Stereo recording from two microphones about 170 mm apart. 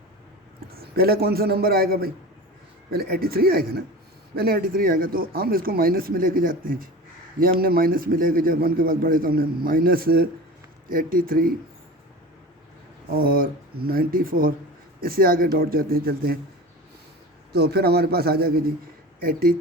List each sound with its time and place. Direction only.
0.8 s a man's voice: 65° right (ahead or behind)
13.1 s a man's voice: 60° right (ahead or behind)
17.5 s a man's voice: 70° right (ahead or behind)